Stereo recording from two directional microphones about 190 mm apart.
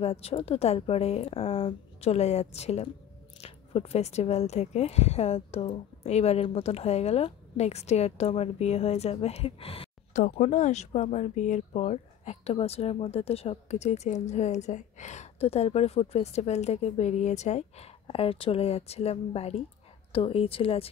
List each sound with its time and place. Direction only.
0.0 s a woman's voice: 30° left (ahead or behind)